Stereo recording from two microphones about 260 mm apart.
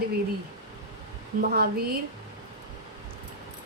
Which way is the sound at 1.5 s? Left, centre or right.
Right.